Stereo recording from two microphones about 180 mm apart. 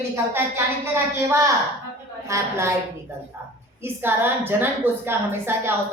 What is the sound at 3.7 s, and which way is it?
A woman's voice, 10° right (ahead or behind).